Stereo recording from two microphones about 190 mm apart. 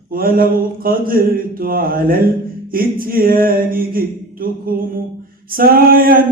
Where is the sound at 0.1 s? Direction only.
50° right (ahead or behind).